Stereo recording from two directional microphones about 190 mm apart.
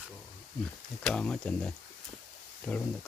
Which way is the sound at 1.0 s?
5° left (ahead or behind).